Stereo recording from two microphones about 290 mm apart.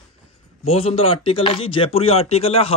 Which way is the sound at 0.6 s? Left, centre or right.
Centre.